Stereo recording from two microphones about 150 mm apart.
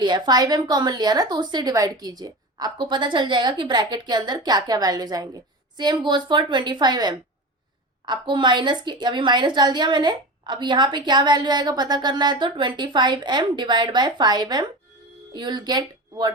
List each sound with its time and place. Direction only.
0.0 s a woman's voice: 30° right (ahead or behind)